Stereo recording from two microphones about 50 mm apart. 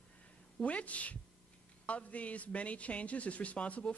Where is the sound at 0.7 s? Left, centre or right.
Left.